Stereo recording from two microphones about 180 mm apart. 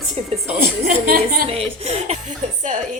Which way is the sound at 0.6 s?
55° right (ahead or behind).